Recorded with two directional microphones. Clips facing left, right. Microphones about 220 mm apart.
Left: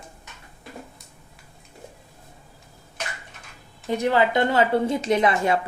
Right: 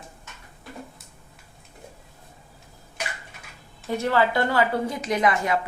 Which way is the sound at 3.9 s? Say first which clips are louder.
Left 2 dB; 15° left (ahead or behind).